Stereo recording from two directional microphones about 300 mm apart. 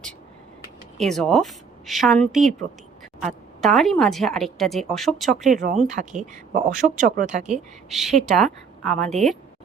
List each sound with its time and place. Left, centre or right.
0.9 s a woman's voice: centre
5.5 s speech: right
7.9 s a woman's voice: centre